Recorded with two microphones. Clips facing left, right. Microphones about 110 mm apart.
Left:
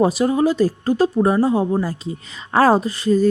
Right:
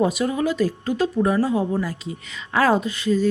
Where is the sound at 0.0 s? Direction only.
35° left (ahead or behind).